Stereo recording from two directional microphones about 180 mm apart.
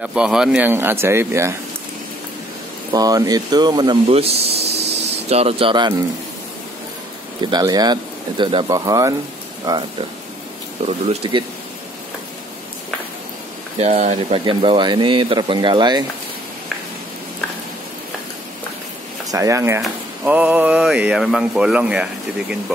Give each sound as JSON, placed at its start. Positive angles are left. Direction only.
{"t": 0.0, "sound": "speech", "side_deg": -5}
{"t": 2.9, "sound": "speech", "side_deg": -20}
{"t": 7.5, "sound": "speech", "side_deg": -20}
{"t": 13.7, "sound": "speech", "side_deg": -35}
{"t": 19.3, "sound": "speech", "side_deg": -15}